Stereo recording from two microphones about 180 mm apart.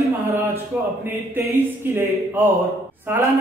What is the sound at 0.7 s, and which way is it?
A man's voice, 10° right (ahead or behind).